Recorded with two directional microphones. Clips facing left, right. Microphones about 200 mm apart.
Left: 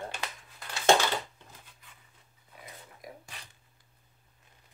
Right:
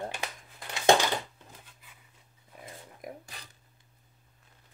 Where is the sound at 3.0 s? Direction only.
55° right (ahead or behind).